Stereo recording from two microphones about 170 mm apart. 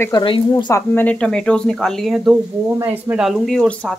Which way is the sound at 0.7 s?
10° left (ahead or behind).